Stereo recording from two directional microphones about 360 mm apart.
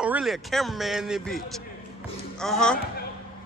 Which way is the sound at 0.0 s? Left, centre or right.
Centre.